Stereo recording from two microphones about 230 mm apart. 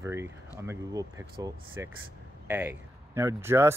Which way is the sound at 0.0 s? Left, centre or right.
Centre.